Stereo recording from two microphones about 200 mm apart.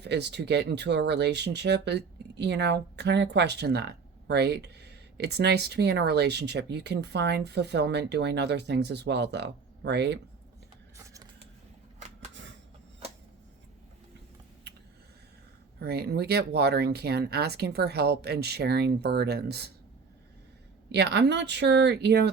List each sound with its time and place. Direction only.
0.0 s speech: 60° right (ahead or behind)
10.9 s printer: 15° right (ahead or behind)
15.8 s speech: 55° right (ahead or behind)
20.9 s speech: 55° right (ahead or behind)